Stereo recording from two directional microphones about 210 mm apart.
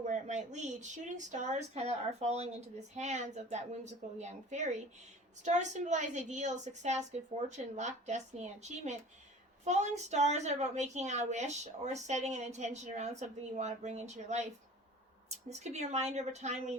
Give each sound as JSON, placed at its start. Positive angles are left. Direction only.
{"t": 0.0, "sound": "a woman's voice", "side_deg": -35}